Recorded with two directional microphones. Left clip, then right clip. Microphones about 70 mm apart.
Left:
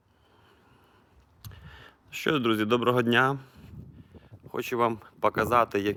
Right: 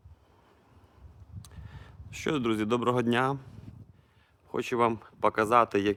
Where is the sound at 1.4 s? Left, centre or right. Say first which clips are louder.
Left 4 dB; centre.